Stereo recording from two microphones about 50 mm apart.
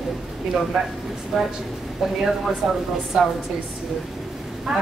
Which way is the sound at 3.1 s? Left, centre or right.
Centre.